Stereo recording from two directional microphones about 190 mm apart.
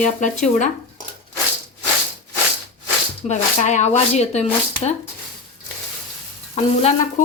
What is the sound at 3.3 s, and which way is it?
Speech, 40° left (ahead or behind).